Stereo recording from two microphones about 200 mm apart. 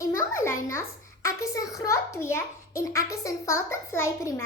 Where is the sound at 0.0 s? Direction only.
15° left (ahead or behind).